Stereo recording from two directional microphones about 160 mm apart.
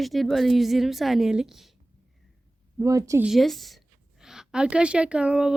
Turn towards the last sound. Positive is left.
turn(degrees=-5)  # may be behind; listen again after turning